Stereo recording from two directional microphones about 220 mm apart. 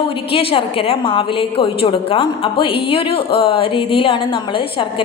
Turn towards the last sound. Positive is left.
turn(degrees=25)  # may be behind; listen again after turning